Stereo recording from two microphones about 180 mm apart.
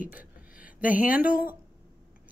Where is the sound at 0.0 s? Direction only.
10° right (ahead or behind).